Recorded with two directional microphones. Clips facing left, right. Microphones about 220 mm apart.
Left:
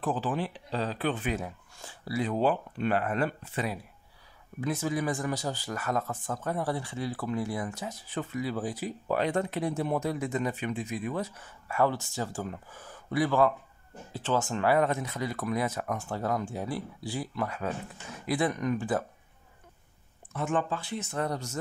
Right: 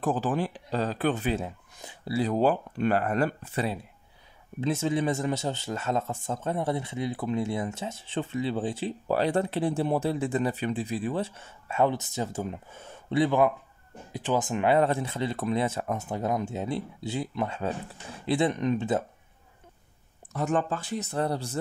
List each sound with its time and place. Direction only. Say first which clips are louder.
0.0 s speech: right 3 dB; 45° right (ahead or behind)
1.3 s speech: right 3 dB; 20° right (ahead or behind)
2.1 s speech: right 3 dB; 40° right (ahead or behind)
4.6 s speech: right 3 dB; 25° right (ahead or behind)
20.3 s speech: right 3 dB; 40° right (ahead or behind)